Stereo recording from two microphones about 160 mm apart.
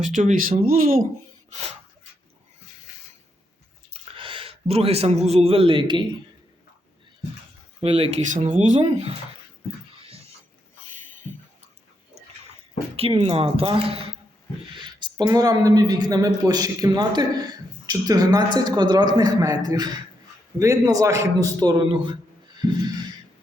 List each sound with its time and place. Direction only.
0.0 s speech: 50° right (ahead or behind)
3.9 s a man's voice: 35° right (ahead or behind)
7.8 s speech: 40° right (ahead or behind)
10.0 s a sound: 40° right (ahead or behind)
13.0 s speech: 35° right (ahead or behind)